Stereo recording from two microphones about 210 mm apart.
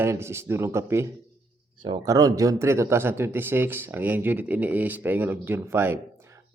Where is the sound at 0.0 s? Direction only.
10° right (ahead or behind).